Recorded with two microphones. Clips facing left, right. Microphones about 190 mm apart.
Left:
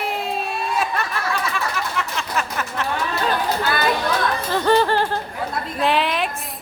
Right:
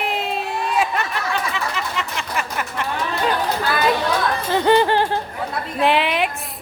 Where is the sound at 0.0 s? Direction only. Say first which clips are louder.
Right 1 dB; 20° right (ahead or behind).